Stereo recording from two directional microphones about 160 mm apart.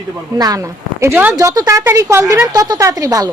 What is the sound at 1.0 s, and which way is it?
A woman's voice, 10° right (ahead or behind).